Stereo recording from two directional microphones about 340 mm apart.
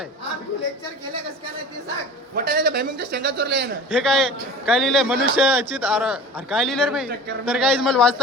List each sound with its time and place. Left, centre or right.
2.3 s a man's voice: right
3.9 s a man's voice: centre